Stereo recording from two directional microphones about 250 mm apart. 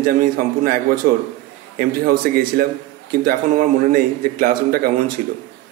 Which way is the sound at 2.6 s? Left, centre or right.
Right.